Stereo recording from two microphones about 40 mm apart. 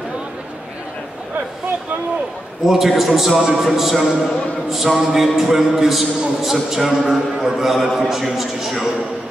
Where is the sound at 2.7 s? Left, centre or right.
Centre.